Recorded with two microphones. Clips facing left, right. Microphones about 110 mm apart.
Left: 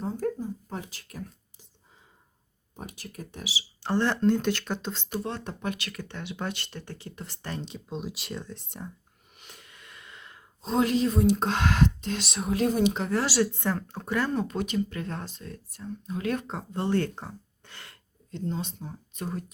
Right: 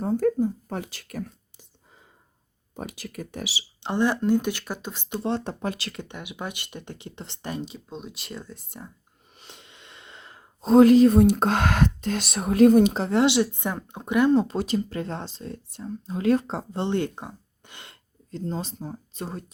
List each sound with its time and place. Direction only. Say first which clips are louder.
0.0 s a sound: right 8 dB; 65° right (ahead or behind)
2.7 s speech: right 6 dB; 90° right
3.8 s speech: right 2 dB; 15° right (ahead or behind)
5.1 s speech: right 7 dB; 30° right (ahead or behind)
6.1 s speech: left 3 dB; 10° right (ahead or behind)
7.5 s speech: right 1 dB; 5° right (ahead or behind)
9.4 s snort: right 2 dB; 25° right (ahead or behind)
10.6 s speech: right 10 dB; 45° right (ahead or behind)
12.9 s speech: right 6 dB; 30° right (ahead or behind)
14.3 s speech: right 5 dB; 30° right (ahead or behind)
18.3 s speech: right 2 dB; 35° right (ahead or behind)